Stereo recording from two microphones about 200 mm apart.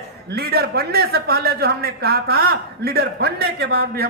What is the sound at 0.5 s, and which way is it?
A man's voice, 50° right (ahead or behind).